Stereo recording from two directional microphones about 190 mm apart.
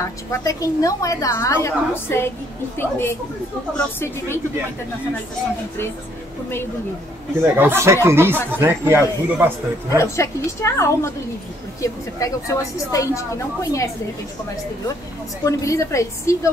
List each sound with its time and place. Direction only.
0.0 s a woman's voice: 15° left (ahead or behind)
7.5 s speech: 10° right (ahead or behind)
9.9 s a woman's voice: 15° left (ahead or behind)
15.4 s a woman's voice: 15° left (ahead or behind)